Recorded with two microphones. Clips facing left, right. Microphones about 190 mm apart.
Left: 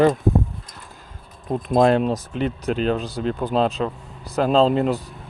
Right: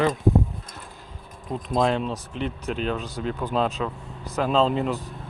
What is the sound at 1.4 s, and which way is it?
Speech, 45° left (ahead or behind).